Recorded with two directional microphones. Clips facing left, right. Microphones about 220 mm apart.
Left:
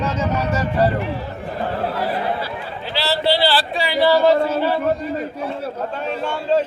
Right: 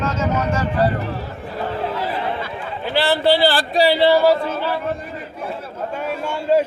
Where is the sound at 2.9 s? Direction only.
50° right (ahead or behind).